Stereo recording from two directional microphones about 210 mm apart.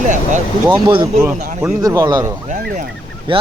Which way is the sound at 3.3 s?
25° right (ahead or behind).